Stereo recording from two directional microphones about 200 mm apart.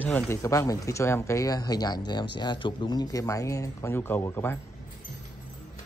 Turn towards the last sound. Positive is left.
turn(degrees=10)  # may be behind; listen again after turning